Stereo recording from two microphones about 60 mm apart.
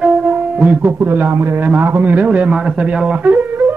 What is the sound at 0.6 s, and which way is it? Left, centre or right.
A man's voice, right.